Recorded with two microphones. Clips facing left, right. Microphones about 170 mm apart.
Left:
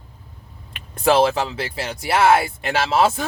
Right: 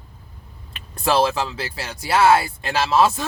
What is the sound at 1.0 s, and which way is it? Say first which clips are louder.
Speech: left 3 dB; 25° left (ahead or behind).